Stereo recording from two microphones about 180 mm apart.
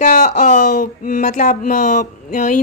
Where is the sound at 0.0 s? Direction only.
45° left (ahead or behind).